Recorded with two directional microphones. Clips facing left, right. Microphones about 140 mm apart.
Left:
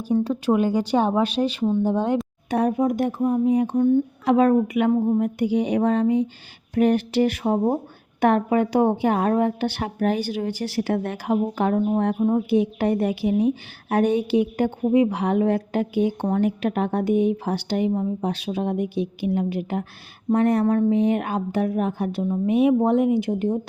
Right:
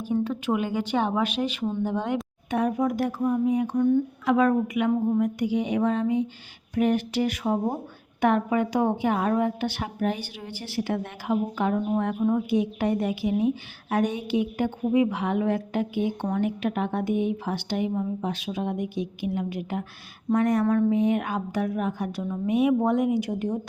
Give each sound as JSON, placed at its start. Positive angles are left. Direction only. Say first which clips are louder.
{"t": 0.0, "sound": "a woman's voice", "louder": "left 4 dB", "side_deg": 35}
{"t": 2.8, "sound": "a woman's voice", "louder": "left 3 dB", "side_deg": 20}
{"t": 9.8, "sound": "a woman's voice", "louder": "left 7 dB", "side_deg": 50}